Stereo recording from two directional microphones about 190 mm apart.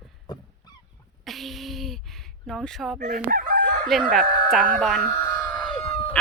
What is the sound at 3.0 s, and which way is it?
Crowing, 45° right (ahead or behind).